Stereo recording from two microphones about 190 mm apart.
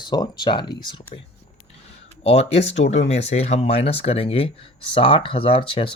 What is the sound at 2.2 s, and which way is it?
Speech, 35° left (ahead or behind).